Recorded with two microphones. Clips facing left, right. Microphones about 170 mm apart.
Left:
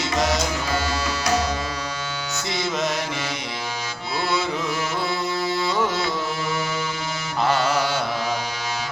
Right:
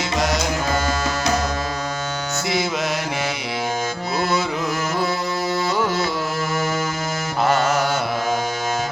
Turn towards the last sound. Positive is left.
turn(degrees=-45)  # may be behind; listen again after turning